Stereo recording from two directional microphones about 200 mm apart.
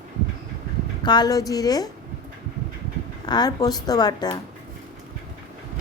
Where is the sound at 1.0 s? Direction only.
20° left (ahead or behind).